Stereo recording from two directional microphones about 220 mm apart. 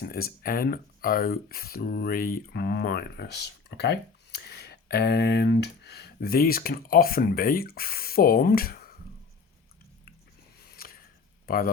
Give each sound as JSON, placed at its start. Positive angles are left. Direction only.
{"t": 0.0, "sound": "speech", "side_deg": 40}
{"t": 10.7, "sound": "a sound", "side_deg": 45}
{"t": 11.4, "sound": "speech", "side_deg": 40}